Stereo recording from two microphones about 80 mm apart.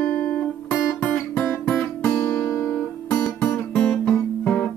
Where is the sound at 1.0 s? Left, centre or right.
Left.